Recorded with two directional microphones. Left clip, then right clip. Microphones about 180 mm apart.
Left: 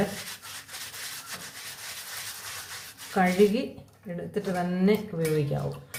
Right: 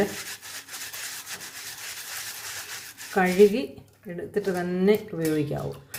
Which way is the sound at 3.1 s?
20° right (ahead or behind).